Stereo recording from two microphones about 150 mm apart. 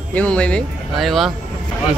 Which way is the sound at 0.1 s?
10° left (ahead or behind).